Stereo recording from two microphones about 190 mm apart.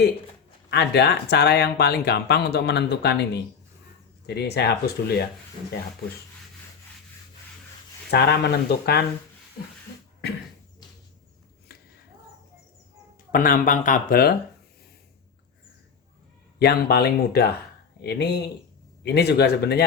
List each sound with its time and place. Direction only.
0.7 s speech: 60° left (ahead or behind)
4.3 s speech: 60° left (ahead or behind)
8.1 s speech: 60° left (ahead or behind)
13.3 s speech: 45° left (ahead or behind)
16.6 s speech: 60° left (ahead or behind)